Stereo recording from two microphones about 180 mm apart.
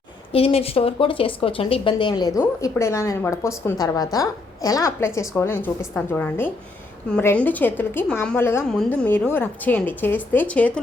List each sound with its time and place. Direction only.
0.3 s a woman's voice: 30° left (ahead or behind); by 10.8 s 5° left (ahead or behind)